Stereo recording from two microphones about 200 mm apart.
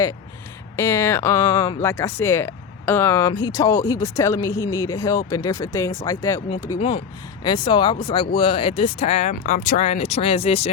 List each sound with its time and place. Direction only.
0.8 s speech: 15° left (ahead or behind)
6.7 s speech: 30° left (ahead or behind)